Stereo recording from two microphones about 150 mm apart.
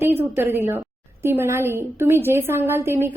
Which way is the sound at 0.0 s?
15° right (ahead or behind).